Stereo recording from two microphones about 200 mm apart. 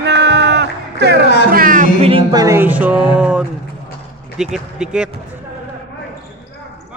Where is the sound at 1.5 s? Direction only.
45° right (ahead or behind).